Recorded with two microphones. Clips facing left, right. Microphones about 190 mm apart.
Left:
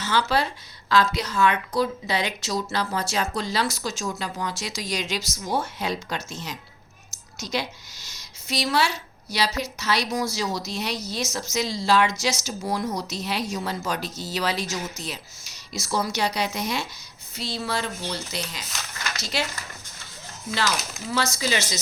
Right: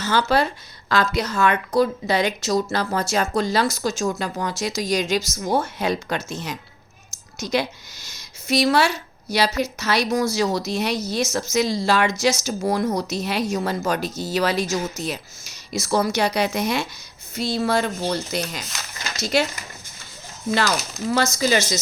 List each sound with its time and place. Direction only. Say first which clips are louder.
0.0 s speech: right 4 dB; 45° right (ahead or behind)
20.5 s speech: right 5 dB; 50° right (ahead or behind)